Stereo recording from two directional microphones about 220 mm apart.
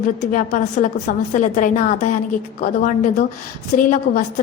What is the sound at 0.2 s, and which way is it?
A woman's voice, 35° left (ahead or behind).